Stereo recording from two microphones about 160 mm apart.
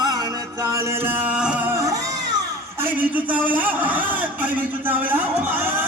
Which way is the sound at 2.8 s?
10° right (ahead or behind).